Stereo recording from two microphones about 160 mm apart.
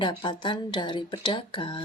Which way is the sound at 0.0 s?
30° left (ahead or behind).